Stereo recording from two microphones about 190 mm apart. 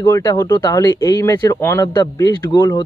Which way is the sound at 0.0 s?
20° left (ahead or behind).